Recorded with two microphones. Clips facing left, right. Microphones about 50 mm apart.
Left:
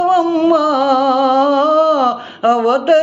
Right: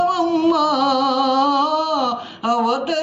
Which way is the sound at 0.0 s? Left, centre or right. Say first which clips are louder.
Left 4 dB; left.